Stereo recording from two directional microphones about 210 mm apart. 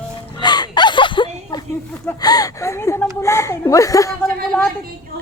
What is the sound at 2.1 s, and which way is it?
Speech, 20° left (ahead or behind).